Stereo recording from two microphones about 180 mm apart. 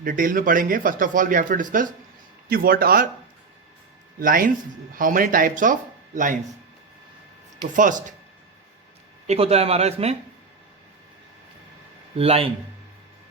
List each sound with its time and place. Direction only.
0.0 s speech: 50° right (ahead or behind)
4.2 s speech: 50° right (ahead or behind)
7.7 s speech: 45° right (ahead or behind)
9.2 s speech: 35° right (ahead or behind)
12.1 s speech: 35° right (ahead or behind)